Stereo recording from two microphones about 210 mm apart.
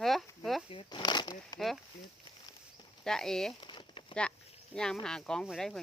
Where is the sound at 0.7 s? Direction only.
25° left (ahead or behind).